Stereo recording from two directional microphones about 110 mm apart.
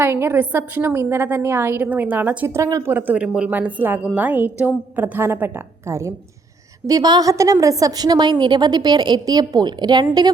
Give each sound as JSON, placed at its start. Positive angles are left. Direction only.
{"t": 0.0, "sound": "a woman's voice", "side_deg": -20}
{"t": 2.6, "sound": "a woman's voice", "side_deg": -30}
{"t": 2.8, "sound": "a woman's voice", "side_deg": -15}